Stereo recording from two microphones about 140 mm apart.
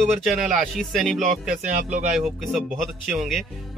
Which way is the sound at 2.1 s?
Centre (ahead or behind).